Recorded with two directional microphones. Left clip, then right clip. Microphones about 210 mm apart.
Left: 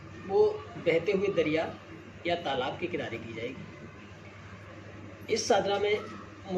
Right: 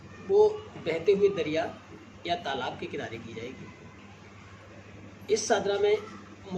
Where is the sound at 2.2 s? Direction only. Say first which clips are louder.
Left 1 dB; 15° right (ahead or behind).